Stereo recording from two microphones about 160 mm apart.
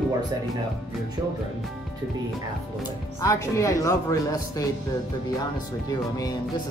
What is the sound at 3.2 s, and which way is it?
Speech, 20° left (ahead or behind).